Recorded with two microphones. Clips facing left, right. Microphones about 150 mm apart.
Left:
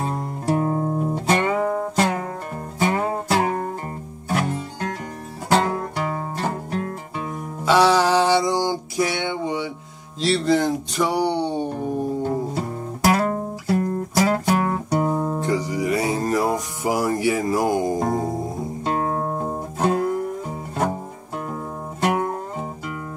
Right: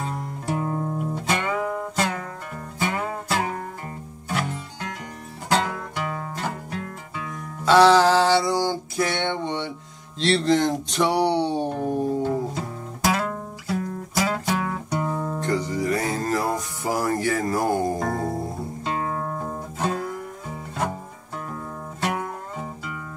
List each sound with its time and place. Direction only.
0.0 s music: 35° left (ahead or behind)
4.3 s music: 45° left (ahead or behind)
7.6 s a sound: 10° left (ahead or behind)
10.2 s music: 5° left (ahead or behind)
13.0 s music: 45° left (ahead or behind)
14.1 s guitar: 45° left (ahead or behind); by 15.4 s 25° left (ahead or behind)
15.4 s music: 15° left (ahead or behind)
18.9 s music: 35° left (ahead or behind)
19.8 s music: 50° left (ahead or behind)
20.4 s music: 30° left (ahead or behind)